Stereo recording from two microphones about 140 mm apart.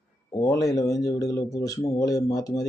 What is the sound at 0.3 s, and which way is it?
Speech, 25° left (ahead or behind).